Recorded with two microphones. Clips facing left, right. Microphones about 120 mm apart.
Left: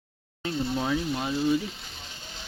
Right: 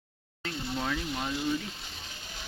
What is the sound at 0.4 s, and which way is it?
Speech, 15° left (ahead or behind).